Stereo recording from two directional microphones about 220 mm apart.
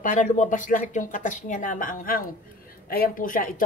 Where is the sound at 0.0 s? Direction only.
35° left (ahead or behind).